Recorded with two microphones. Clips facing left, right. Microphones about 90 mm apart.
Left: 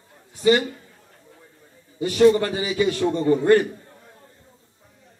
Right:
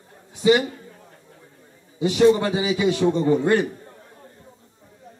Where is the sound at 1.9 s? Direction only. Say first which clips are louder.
Even; 15° right (ahead or behind).